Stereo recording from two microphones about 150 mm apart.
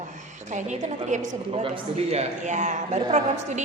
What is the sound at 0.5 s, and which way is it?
A woman's voice, 55° right (ahead or behind).